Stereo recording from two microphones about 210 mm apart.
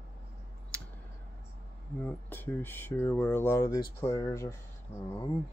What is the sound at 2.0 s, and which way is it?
Speech, 10° left (ahead or behind).